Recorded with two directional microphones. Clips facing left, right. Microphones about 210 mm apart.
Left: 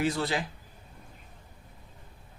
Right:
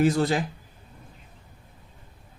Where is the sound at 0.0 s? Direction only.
45° right (ahead or behind).